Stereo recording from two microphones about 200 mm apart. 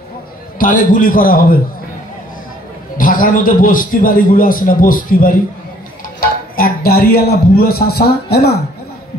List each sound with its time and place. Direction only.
0.6 s a man's voice: 40° left (ahead or behind)
3.0 s a man's voice: 45° left (ahead or behind)
6.5 s a man's voice: 50° left (ahead or behind)